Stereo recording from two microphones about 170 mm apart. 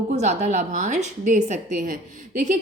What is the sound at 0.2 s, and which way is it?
A woman's voice, 40° right (ahead or behind).